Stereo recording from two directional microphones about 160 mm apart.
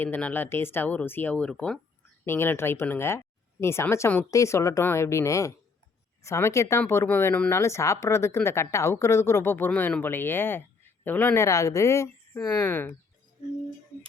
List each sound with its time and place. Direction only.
0.0 s speech: 10° left (ahead or behind)